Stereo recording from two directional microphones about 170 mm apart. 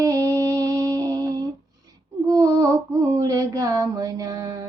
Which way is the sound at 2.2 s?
20° right (ahead or behind).